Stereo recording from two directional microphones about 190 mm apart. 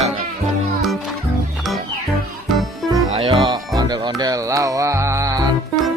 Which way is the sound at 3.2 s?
25° right (ahead or behind).